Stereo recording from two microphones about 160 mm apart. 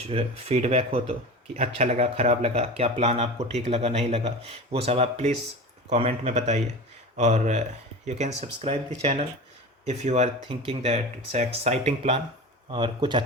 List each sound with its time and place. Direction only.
0.1 s speech: 40° right (ahead or behind)
12.7 s speech: 30° right (ahead or behind)